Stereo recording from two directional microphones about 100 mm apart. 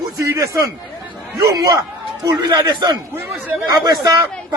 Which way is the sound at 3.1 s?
20° right (ahead or behind).